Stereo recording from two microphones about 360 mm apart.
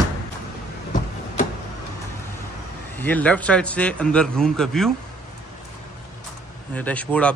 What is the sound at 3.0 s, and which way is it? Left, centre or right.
A man's voice, centre.